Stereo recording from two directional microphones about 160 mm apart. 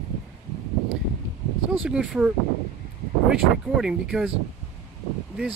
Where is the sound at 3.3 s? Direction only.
5° right (ahead or behind).